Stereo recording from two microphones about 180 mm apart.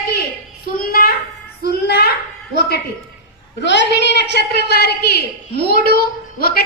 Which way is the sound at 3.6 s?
75° left (ahead or behind).